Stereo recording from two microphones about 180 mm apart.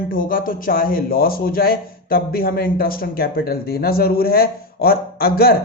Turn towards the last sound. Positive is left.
turn(degrees=60)  # may be behind; listen again after turning